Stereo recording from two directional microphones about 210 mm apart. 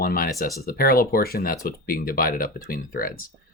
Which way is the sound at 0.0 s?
45° left (ahead or behind).